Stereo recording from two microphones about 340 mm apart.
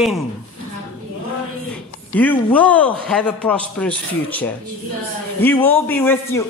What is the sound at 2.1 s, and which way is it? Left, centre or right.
A man's voice, centre.